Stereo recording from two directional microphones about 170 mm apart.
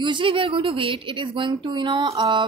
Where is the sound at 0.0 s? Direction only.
30° right (ahead or behind).